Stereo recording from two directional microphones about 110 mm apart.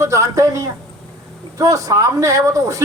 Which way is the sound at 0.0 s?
30° right (ahead or behind).